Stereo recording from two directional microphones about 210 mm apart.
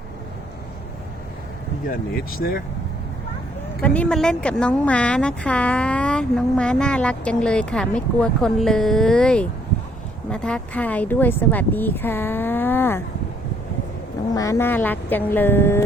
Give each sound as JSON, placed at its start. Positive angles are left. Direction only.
{"t": 2.1, "sound": "speech", "side_deg": 45}
{"t": 3.8, "sound": "a woman's voice", "side_deg": 5}
{"t": 14.3, "sound": "speech", "side_deg": 15}